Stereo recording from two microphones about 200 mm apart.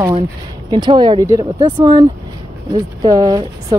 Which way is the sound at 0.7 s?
20° right (ahead or behind).